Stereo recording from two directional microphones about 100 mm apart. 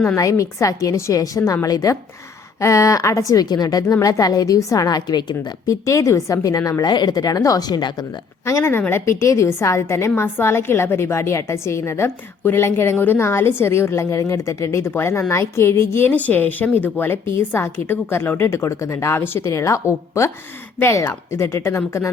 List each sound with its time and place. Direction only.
0.2 s a woman's voice: 30° left (ahead or behind)
8.4 s a woman's voice: 25° left (ahead or behind)